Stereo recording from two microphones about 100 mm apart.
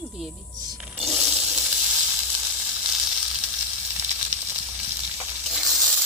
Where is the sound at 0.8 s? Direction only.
5° right (ahead or behind).